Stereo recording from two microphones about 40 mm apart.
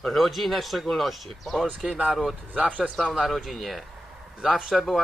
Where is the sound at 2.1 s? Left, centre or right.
Centre.